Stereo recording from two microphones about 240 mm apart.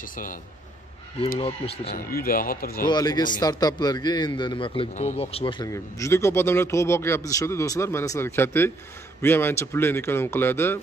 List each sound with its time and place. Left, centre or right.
0.0 s speech: left
1.4 s speech: left
2.0 s speech: left
2.9 s a man's voice: centre